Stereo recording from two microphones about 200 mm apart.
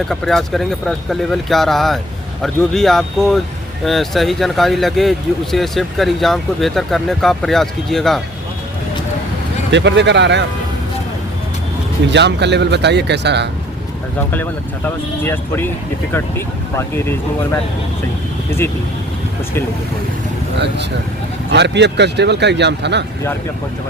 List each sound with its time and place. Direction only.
0.1 s speech: centre (ahead or behind)
9.7 s speech: 60° right (ahead or behind)
12.0 s speech: 60° right (ahead or behind)
14.8 s speech: 10° left (ahead or behind)
16.7 s speech: 10° left (ahead or behind)
21.5 s speech: 60° right (ahead or behind)